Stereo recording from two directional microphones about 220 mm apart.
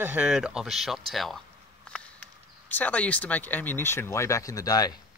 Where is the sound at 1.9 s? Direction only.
5° left (ahead or behind).